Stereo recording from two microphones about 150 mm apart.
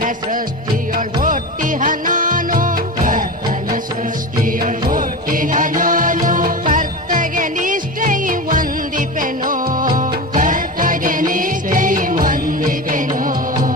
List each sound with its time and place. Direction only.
0.9 s music: 65° right (ahead or behind)
4.6 s music: 65° right (ahead or behind)